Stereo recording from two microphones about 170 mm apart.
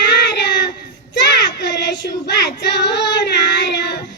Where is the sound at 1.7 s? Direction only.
90° left.